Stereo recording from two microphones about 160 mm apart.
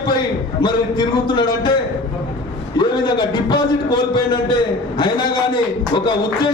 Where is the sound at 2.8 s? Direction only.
30° left (ahead or behind).